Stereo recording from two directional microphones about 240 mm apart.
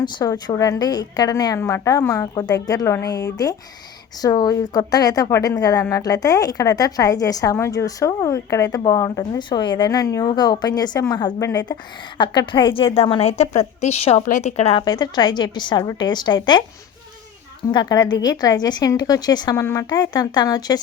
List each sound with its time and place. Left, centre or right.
0.0 s a woman's voice: centre
17.7 s a woman's voice: centre